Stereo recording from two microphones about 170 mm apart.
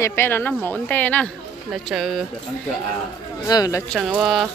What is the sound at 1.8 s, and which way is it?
Speech, centre (ahead or behind).